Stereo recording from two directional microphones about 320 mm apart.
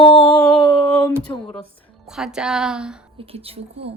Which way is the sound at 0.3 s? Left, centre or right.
Centre.